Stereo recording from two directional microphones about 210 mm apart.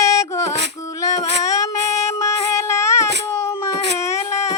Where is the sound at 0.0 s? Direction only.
15° left (ahead or behind).